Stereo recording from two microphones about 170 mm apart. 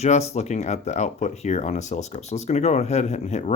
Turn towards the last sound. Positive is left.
turn(degrees=40)  # may be behind; listen again after turning